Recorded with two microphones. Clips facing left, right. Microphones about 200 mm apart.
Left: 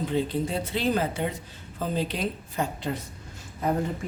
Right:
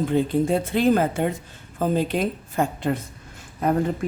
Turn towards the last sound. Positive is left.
turn(degrees=-60)  # may be behind; listen again after turning